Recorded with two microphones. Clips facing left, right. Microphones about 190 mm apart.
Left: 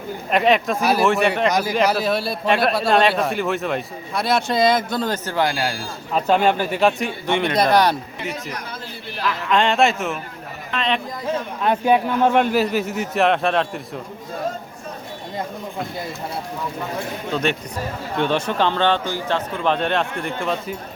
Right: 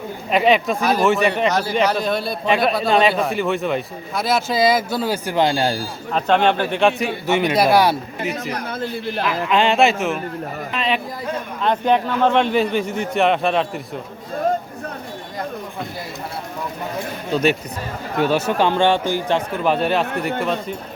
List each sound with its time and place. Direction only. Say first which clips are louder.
0.3 s a man's voice: right 1 dB; centre (ahead or behind); by 5.8 s 30° right (ahead or behind)
6.1 s a man's voice: right 1 dB; 5° left (ahead or behind)
9.5 s a man's voice: right 1 dB; 5° right (ahead or behind)
11.6 s a man's voice: even; 10° left (ahead or behind)
18.2 s a man's voice: right 2 dB; 5° right (ahead or behind)